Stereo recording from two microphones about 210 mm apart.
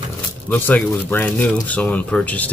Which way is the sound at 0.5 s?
10° left (ahead or behind).